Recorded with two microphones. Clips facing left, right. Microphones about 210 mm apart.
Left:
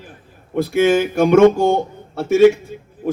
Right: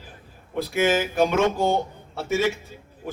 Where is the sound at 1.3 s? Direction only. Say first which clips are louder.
Left 10 dB; 55° left (ahead or behind).